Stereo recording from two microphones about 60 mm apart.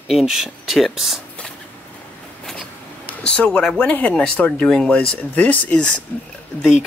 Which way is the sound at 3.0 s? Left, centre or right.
Centre.